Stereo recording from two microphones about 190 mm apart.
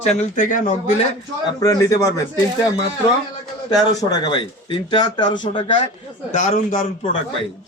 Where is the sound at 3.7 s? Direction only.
20° left (ahead or behind).